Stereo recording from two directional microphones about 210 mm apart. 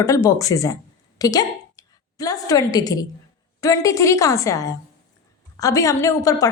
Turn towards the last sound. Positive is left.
turn(degrees=15)  # may be behind; listen again after turning